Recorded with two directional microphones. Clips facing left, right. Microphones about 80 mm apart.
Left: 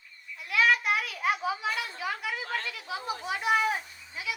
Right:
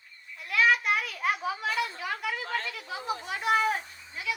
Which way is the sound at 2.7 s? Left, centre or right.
Centre.